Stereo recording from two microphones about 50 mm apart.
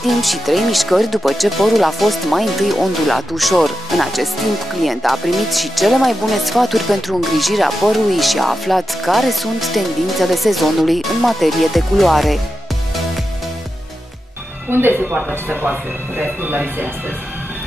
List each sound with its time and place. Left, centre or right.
0.0 s speech: centre
14.7 s speech: right
15.4 s speech: right